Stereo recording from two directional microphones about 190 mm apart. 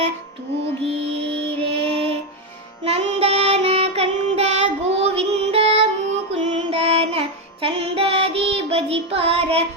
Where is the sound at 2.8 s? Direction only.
30° right (ahead or behind).